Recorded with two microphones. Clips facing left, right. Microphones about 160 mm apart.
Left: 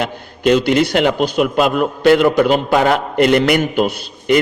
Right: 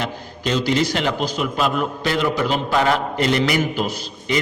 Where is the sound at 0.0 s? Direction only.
60° left (ahead or behind).